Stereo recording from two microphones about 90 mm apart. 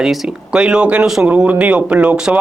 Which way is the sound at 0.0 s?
5° right (ahead or behind).